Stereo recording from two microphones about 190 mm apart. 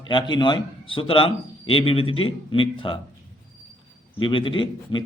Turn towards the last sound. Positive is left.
turn(degrees=25)  # may be behind; listen again after turning